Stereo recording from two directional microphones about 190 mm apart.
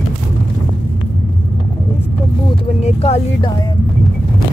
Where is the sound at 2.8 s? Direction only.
35° left (ahead or behind).